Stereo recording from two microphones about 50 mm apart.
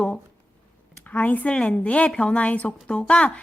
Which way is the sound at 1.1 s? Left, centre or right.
Left.